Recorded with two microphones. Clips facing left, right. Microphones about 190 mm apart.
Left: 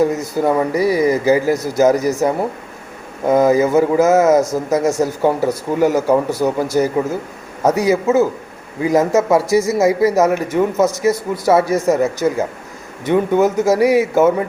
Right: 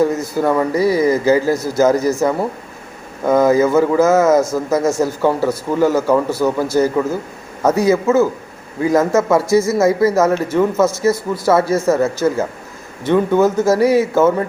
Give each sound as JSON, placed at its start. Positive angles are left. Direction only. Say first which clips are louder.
{"t": 0.0, "sound": "a man's voice", "louder": "even", "side_deg": 15}